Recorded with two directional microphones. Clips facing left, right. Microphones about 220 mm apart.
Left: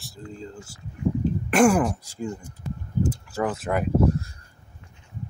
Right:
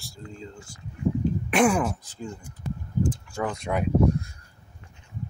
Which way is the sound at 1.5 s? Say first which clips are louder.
Left 4 dB; centre (ahead or behind).